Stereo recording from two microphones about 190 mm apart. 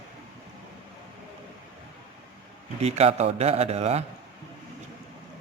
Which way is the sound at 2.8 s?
35° right (ahead or behind).